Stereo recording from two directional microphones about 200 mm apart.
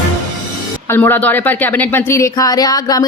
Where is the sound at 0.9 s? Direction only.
10° left (ahead or behind).